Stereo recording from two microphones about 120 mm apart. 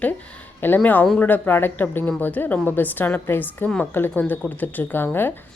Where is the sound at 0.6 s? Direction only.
15° left (ahead or behind).